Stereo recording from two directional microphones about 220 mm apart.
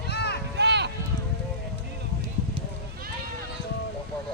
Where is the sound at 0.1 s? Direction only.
50° left (ahead or behind).